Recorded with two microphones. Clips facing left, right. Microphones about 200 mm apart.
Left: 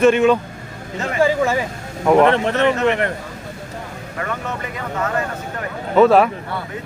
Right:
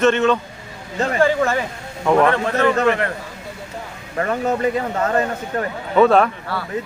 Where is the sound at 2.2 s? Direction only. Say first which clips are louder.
Left 1 dB; 25° left (ahead or behind).